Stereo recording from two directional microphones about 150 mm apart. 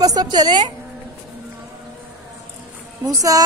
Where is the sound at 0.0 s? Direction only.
25° right (ahead or behind).